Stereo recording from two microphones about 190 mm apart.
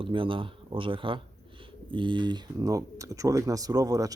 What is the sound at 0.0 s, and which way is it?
Speech, 25° right (ahead or behind).